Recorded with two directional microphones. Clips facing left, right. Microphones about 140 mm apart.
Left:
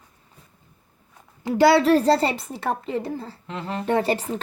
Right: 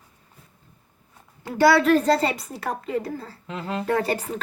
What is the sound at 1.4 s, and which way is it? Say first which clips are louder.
A woman's voice: left 1 dB; 25° left (ahead or behind).